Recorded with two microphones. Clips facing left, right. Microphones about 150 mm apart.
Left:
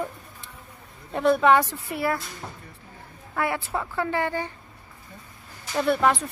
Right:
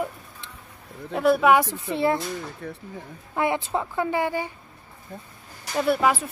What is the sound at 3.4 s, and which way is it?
A woman's voice, 20° right (ahead or behind).